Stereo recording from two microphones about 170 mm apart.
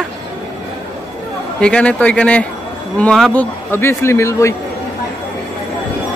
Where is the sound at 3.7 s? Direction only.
15° left (ahead or behind).